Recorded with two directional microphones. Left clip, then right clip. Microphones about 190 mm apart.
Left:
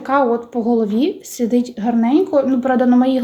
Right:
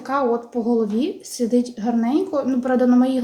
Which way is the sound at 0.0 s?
25° left (ahead or behind).